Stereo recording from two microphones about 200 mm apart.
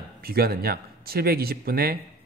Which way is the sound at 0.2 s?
50° right (ahead or behind).